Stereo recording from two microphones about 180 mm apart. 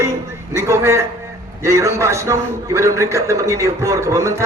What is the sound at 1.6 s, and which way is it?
A man's voice, 15° right (ahead or behind).